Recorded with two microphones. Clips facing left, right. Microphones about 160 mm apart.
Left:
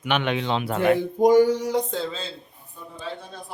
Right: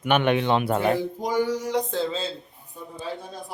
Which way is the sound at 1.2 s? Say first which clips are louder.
Left 12 dB; 50° left (ahead or behind).